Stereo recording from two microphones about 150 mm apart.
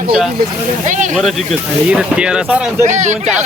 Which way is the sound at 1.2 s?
Centre (ahead or behind).